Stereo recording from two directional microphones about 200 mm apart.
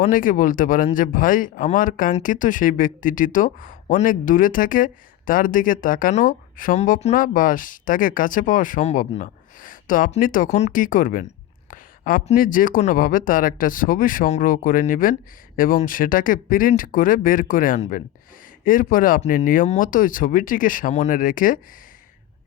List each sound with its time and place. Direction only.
0.0 s speech: 40° left (ahead or behind)